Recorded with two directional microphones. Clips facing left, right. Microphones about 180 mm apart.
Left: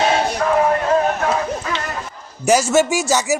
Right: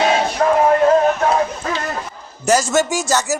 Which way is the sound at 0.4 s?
35° right (ahead or behind).